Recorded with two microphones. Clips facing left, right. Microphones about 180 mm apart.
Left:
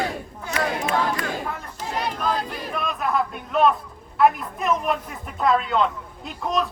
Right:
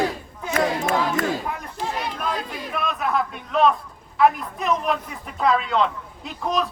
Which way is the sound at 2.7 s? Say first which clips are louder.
Right 1 dB; centre (ahead or behind).